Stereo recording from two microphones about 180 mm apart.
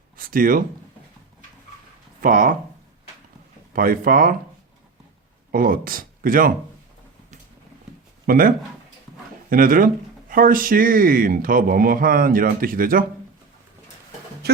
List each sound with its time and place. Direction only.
0.2 s speech: 50° right (ahead or behind)
2.2 s speech: 50° right (ahead or behind)
3.7 s speech: 55° right (ahead or behind)
5.5 s speech: 50° right (ahead or behind)
8.3 s speech: 50° right (ahead or behind)
14.4 s speech: 65° right (ahead or behind)